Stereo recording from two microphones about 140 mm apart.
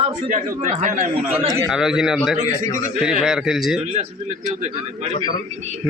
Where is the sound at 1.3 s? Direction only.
20° right (ahead or behind).